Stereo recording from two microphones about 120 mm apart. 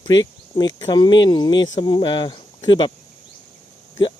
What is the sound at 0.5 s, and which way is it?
Speech, 35° left (ahead or behind).